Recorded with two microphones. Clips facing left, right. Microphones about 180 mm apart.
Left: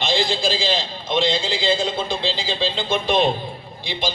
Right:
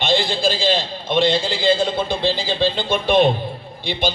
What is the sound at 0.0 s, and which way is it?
A man's voice, 60° right (ahead or behind).